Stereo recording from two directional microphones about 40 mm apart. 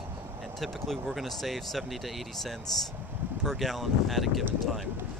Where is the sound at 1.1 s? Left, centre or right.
Centre.